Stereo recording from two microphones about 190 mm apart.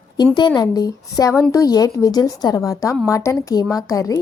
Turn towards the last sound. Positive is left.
turn(degrees=15)  # may be behind; listen again after turning